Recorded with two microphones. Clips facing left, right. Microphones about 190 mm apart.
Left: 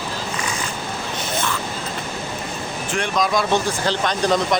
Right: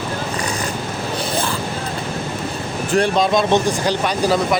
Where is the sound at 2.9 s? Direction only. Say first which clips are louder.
Right 5 dB; 35° right (ahead or behind); by 4.6 s 5° right (ahead or behind).